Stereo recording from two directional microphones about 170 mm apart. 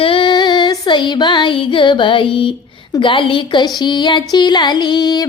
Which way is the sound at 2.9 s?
30° left (ahead or behind).